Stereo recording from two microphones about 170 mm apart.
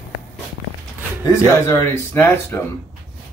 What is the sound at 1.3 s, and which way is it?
Speech, 20° left (ahead or behind).